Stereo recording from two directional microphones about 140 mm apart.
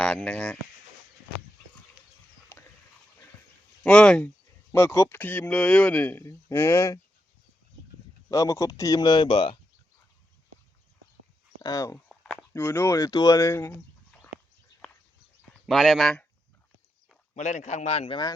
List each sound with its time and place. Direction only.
0.0 s speech: 5° left (ahead or behind)
2.5 s a sound: 15° left (ahead or behind)
3.8 s speech: 5° left (ahead or behind)
4.7 s speech: 15° left (ahead or behind)
8.3 s speech: 25° left (ahead or behind); by 9.6 s 40° left (ahead or behind)
11.6 s speech: 25° left (ahead or behind)
11.9 s a sound: 5° left (ahead or behind)
12.5 s speech: 15° left (ahead or behind)
15.6 s speech: centre (ahead or behind)
17.3 s speech: 55° left (ahead or behind)